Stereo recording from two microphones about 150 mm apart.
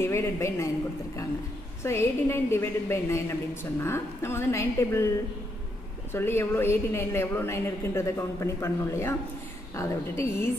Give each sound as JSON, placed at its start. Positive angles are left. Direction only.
{"t": 0.0, "sound": "a woman's voice", "side_deg": 15}
{"t": 1.8, "sound": "a woman's voice", "side_deg": 20}
{"t": 6.1, "sound": "a woman's voice", "side_deg": 15}